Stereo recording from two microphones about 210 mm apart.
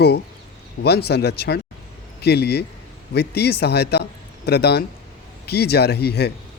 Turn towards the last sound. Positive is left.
turn(degrees=50)  # may be behind; listen again after turning